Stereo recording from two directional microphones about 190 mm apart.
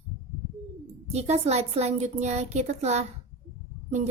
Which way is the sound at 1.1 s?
35° right (ahead or behind).